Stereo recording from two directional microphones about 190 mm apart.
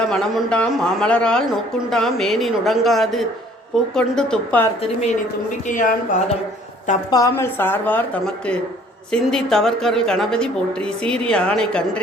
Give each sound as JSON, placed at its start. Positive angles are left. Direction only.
{"t": 0.1, "sound": "speech", "side_deg": 0}
{"t": 5.6, "sound": "speech", "side_deg": 45}
{"t": 7.1, "sound": "a woman's voice", "side_deg": 15}